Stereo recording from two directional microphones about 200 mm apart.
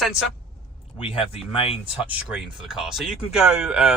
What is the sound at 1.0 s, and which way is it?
Speech, 25° left (ahead or behind).